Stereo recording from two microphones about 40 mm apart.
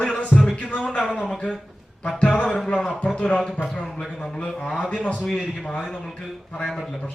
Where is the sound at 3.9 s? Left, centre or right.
Centre.